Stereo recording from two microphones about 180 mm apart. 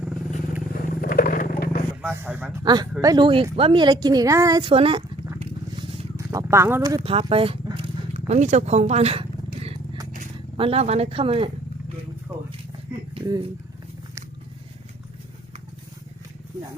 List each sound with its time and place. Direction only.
0.0 s vehicle: 5° right (ahead or behind)
0.7 s vehicle: 50° left (ahead or behind)
2.0 s speech: 10° right (ahead or behind)
2.6 s speech: 25° right (ahead or behind)
4.7 s speech: 30° right (ahead or behind)
5.4 s vehicle: 30° right (ahead or behind)
6.1 s a sound: 15° right (ahead or behind)
7.0 s speech: 30° right (ahead or behind)
9.6 s vehicle: 35° right (ahead or behind)
10.6 s speech: 35° right (ahead or behind)